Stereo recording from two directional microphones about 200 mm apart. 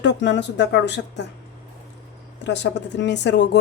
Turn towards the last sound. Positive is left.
turn(degrees=60)  # may be behind; listen again after turning